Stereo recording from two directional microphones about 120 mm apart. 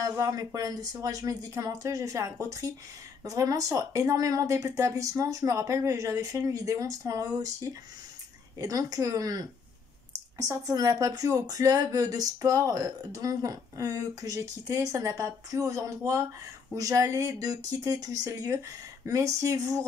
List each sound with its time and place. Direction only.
0.0 s speech: 30° right (ahead or behind)